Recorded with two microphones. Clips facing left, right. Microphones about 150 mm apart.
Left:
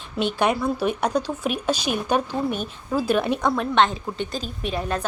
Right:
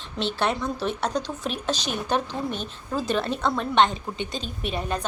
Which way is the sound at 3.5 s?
Centre (ahead or behind).